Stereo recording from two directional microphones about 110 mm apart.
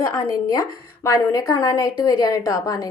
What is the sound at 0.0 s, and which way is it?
A woman's voice, 25° left (ahead or behind).